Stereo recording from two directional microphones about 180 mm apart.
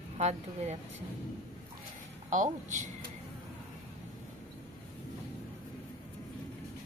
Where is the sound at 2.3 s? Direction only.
45° right (ahead or behind).